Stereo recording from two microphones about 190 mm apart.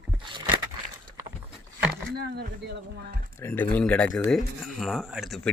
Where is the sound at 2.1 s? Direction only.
60° right (ahead or behind).